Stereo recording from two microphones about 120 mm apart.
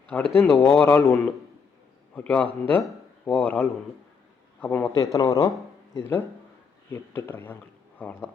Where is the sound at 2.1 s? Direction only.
10° left (ahead or behind).